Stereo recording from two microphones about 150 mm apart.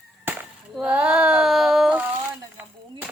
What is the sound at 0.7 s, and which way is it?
Child singing, 5° right (ahead or behind).